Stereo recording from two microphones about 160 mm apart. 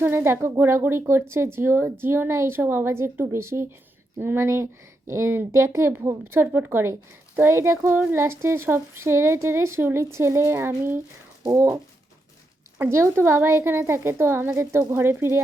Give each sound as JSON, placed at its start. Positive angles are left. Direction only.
{"t": 0.0, "sound": "speech", "side_deg": -15}
{"t": 12.8, "sound": "speech", "side_deg": -15}